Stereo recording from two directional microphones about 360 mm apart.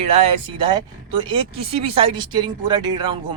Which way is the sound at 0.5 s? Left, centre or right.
Centre.